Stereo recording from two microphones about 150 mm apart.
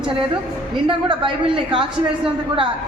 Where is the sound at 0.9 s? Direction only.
35° right (ahead or behind).